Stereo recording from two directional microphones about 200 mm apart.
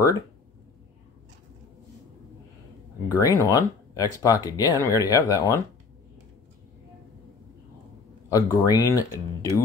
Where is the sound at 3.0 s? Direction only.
15° left (ahead or behind).